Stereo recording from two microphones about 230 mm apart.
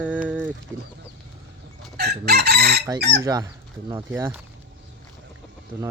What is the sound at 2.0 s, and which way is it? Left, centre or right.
Chicken, right.